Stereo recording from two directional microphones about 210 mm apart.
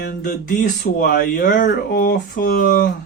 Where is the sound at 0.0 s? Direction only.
40° left (ahead or behind).